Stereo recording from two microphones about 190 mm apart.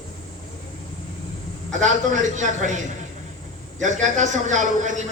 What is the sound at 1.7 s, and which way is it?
A man's voice, 40° right (ahead or behind).